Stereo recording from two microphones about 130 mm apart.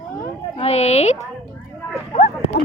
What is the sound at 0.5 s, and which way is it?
Speech, 50° left (ahead or behind).